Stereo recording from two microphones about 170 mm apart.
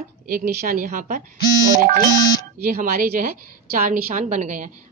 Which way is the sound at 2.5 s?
55° right (ahead or behind).